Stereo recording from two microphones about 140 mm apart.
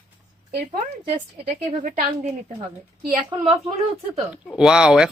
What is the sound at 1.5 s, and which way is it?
Speech, 75° right (ahead or behind).